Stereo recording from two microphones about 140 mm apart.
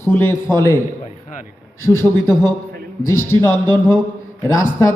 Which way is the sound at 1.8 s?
15° left (ahead or behind).